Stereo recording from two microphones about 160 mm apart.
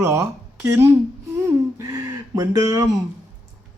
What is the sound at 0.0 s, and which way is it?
Speech, 15° right (ahead or behind).